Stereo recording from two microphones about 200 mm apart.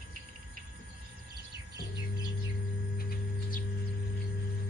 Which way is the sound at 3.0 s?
45° left (ahead or behind).